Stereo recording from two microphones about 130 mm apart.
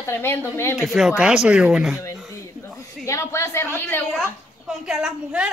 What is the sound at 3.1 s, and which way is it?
Speech, 20° left (ahead or behind).